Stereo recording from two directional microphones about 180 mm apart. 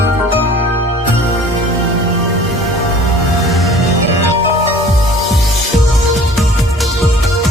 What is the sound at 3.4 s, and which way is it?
Music, centre (ahead or behind).